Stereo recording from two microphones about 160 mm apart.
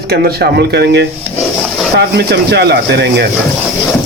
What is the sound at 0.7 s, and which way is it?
Speech, 90° right.